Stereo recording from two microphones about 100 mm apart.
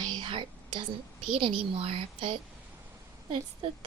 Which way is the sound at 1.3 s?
70° right (ahead or behind).